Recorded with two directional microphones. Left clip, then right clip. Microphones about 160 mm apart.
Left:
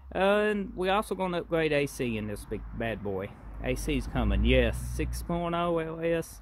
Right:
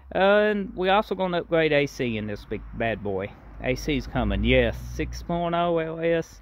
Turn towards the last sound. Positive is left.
turn(degrees=-15)  # may be behind; listen again after turning